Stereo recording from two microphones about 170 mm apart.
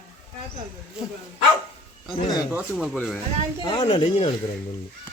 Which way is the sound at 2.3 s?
5° right (ahead or behind).